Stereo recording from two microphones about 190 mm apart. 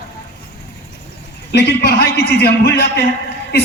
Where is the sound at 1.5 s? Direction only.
60° left (ahead or behind).